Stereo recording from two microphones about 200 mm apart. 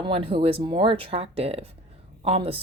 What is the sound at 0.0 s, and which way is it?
Speech, 25° right (ahead or behind).